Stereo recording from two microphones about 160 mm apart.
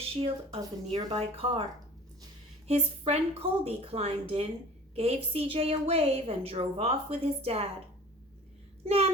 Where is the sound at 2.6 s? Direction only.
40° right (ahead or behind).